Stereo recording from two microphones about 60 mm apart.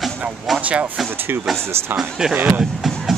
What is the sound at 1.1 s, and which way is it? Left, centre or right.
Speech, right.